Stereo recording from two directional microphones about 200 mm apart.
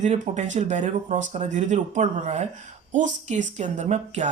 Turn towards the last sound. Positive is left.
turn(degrees=-35)  # may be behind; listen again after turning